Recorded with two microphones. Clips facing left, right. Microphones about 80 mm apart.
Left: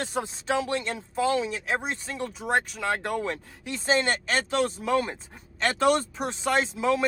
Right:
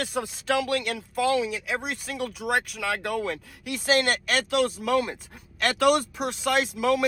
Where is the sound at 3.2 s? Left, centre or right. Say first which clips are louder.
Right 1 dB; left.